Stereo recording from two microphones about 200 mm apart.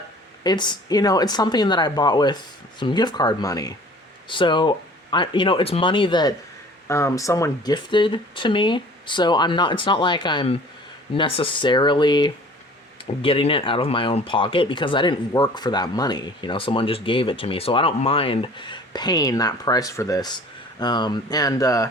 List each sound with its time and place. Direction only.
0.4 s speech: 20° left (ahead or behind)